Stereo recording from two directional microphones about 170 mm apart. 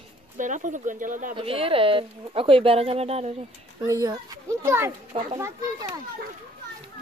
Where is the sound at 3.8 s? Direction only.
20° right (ahead or behind).